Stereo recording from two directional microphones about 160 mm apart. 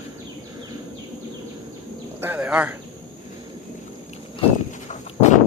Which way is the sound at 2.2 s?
10° right (ahead or behind).